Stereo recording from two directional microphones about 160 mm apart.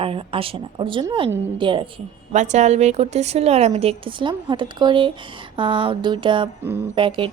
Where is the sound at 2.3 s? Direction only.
45° right (ahead or behind).